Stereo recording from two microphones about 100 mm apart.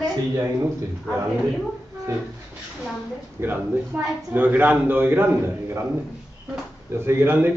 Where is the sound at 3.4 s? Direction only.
20° right (ahead or behind).